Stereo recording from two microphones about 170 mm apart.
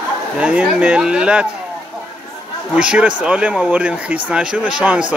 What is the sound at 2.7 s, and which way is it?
Speech, 5° right (ahead or behind).